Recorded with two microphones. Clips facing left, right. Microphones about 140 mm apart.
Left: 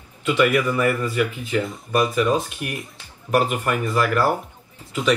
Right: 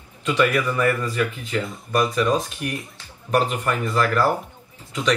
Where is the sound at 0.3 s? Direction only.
10° left (ahead or behind).